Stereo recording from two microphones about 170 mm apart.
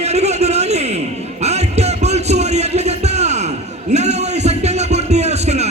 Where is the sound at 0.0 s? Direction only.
40° right (ahead or behind).